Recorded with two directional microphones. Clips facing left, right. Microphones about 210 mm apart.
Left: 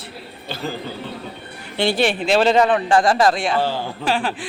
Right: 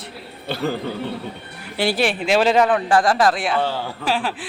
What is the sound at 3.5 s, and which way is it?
Speech, 10° left (ahead or behind).